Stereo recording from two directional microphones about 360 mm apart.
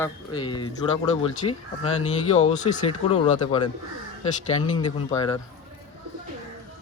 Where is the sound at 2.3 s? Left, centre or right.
Centre.